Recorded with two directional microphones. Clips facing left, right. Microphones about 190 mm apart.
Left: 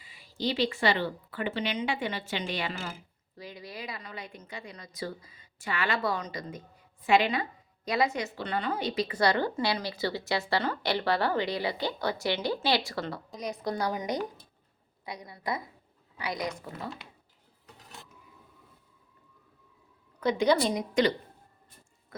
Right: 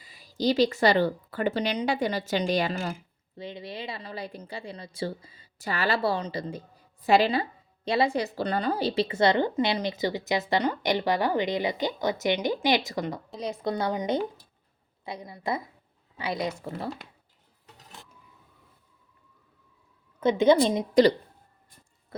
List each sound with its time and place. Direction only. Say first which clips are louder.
0.0 s a woman's voice: right 6 dB; 40° right (ahead or behind)
3.3 s a woman's voice: right 5 dB; 25° right (ahead or behind)
20.1 s a woman's voice: right 5 dB; 20° right (ahead or behind)